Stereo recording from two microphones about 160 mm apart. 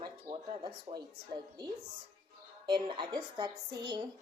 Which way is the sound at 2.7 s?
30° right (ahead or behind).